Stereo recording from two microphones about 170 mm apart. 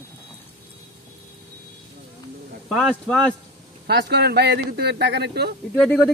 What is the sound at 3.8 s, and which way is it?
Speech, 80° right.